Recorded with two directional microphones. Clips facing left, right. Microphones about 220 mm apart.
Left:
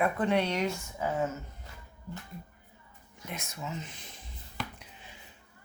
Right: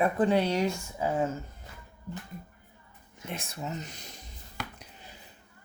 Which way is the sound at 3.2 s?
30° right (ahead or behind).